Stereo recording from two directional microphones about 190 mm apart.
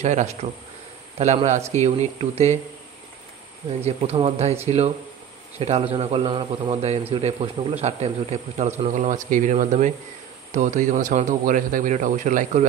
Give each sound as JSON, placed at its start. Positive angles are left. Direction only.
{"t": 0.0, "sound": "a man's voice", "side_deg": -40}
{"t": 3.8, "sound": "a man's voice", "side_deg": -30}